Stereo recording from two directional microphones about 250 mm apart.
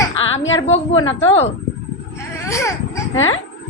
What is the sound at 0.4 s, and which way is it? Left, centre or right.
Speech, left.